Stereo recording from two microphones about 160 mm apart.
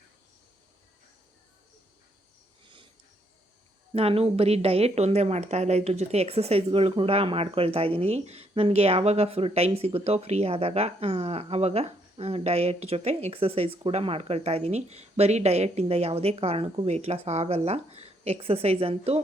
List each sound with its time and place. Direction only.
3.9 s a woman's voice: 40° right (ahead or behind)